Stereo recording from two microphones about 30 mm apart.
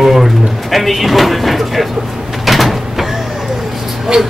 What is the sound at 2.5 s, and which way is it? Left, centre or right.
Sliding door, centre.